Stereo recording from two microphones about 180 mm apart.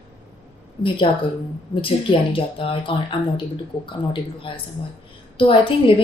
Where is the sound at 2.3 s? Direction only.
30° left (ahead or behind).